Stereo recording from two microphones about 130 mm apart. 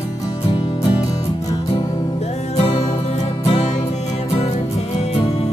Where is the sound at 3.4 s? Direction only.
55° left (ahead or behind).